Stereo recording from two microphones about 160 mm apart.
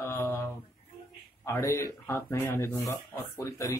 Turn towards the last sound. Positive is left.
turn(degrees=20)  # may be behind; listen again after turning